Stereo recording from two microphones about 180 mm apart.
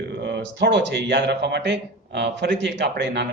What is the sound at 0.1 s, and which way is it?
Speech, 70° right (ahead or behind).